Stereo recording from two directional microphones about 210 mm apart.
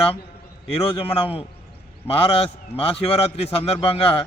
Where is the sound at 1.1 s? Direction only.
25° left (ahead or behind).